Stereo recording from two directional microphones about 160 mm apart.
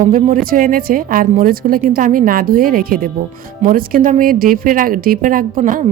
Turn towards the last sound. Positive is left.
turn(degrees=-55)  # may be behind; listen again after turning